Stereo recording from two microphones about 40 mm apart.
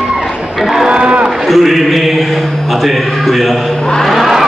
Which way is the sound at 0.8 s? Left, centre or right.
Right.